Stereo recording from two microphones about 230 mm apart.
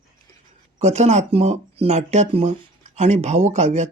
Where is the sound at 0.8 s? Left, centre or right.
Right.